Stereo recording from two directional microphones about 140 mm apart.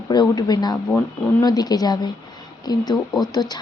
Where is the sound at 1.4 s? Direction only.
30° left (ahead or behind).